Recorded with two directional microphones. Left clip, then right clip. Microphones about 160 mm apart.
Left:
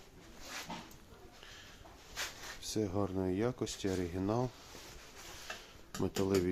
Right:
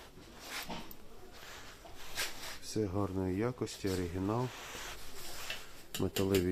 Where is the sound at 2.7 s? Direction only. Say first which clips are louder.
Even; 10° left (ahead or behind).